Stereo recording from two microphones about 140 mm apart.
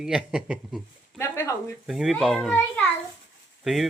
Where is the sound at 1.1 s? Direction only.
20° left (ahead or behind).